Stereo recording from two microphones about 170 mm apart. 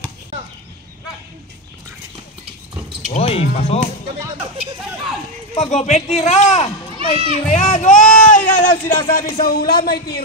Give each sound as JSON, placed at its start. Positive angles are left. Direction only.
{"t": 3.1, "sound": "speech", "side_deg": 35}
{"t": 5.6, "sound": "speech", "side_deg": 40}